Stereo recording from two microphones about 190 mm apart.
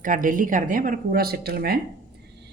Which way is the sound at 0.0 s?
45° right (ahead or behind).